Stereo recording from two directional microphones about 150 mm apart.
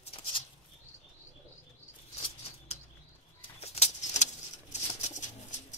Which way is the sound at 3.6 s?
45° left (ahead or behind).